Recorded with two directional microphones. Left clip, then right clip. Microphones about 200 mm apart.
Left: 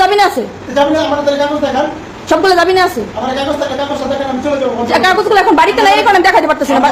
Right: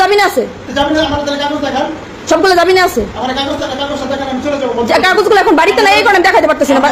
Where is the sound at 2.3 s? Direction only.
15° right (ahead or behind).